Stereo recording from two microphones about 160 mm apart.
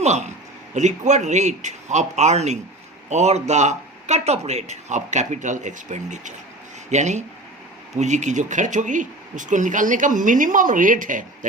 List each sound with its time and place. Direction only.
0.0 s a man's voice: 45° right (ahead or behind)